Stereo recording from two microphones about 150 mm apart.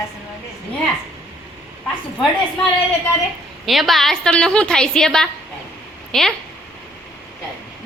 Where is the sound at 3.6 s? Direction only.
Centre (ahead or behind).